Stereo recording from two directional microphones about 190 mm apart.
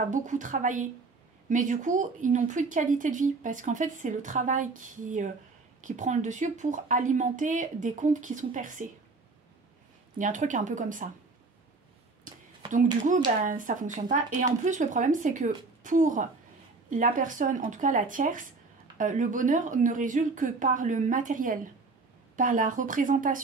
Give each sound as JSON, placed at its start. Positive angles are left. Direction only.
{"t": 0.1, "sound": "speech", "side_deg": -40}
{"t": 10.1, "sound": "speech", "side_deg": -40}
{"t": 12.3, "sound": "a sound", "side_deg": -45}
{"t": 13.4, "sound": "speech", "side_deg": -45}